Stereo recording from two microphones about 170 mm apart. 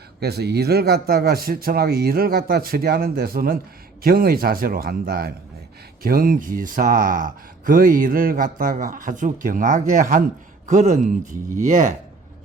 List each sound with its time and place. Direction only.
0.2 s speech: 70° right (ahead or behind); by 11.9 s 50° right (ahead or behind)